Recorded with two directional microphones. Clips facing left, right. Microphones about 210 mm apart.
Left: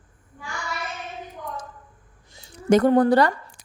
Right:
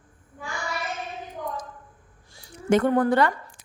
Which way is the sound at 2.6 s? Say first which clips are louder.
Left 4 dB; 40° left (ahead or behind).